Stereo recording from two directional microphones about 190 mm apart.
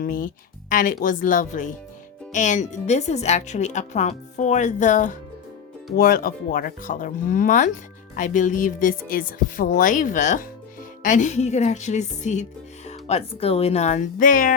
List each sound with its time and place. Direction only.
0.0 s speech: 50° left (ahead or behind)